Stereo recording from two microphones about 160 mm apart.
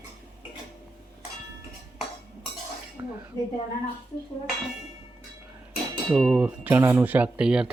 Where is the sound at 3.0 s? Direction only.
20° right (ahead or behind).